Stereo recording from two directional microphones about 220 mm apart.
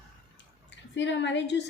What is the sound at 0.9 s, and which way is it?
Speech, 55° left (ahead or behind).